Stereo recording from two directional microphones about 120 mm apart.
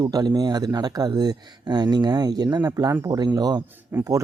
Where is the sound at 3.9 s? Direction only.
15° right (ahead or behind).